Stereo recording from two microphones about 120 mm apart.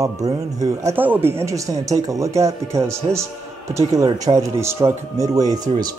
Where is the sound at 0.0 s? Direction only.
30° right (ahead or behind).